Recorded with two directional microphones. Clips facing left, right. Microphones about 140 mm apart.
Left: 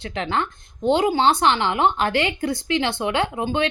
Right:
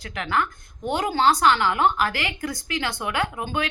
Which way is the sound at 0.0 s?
25° left (ahead or behind).